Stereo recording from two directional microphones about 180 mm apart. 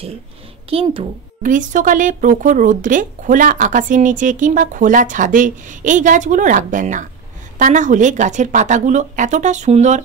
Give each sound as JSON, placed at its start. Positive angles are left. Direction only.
{"t": 0.7, "sound": "a child's voice", "side_deg": -30}
{"t": 1.4, "sound": "speech", "side_deg": -45}